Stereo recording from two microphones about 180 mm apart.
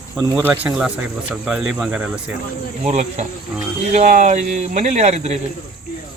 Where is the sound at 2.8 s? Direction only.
40° right (ahead or behind).